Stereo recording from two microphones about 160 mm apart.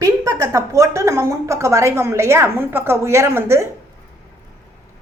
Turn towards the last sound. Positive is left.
turn(degrees=-15)  # may be behind; listen again after turning